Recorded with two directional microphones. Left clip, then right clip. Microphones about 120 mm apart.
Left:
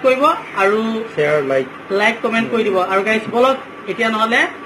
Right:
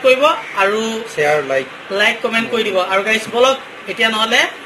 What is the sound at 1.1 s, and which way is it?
Speech, 40° right (ahead or behind).